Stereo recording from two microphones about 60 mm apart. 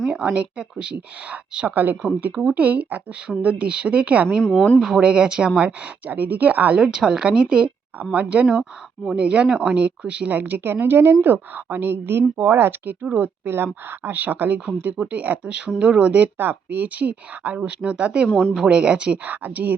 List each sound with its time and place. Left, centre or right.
0.3 s a woman's voice: centre
2.3 s a woman's voice: centre
2.6 s a woman's voice: right
4.4 s speech: centre
4.9 s a woman's voice: centre
6.7 s a woman's voice: centre; by 14.6 s right
14.9 s a woman's voice: centre
16.4 s a woman's voice: right
18.3 s speech: centre
18.6 s a woman's voice: centre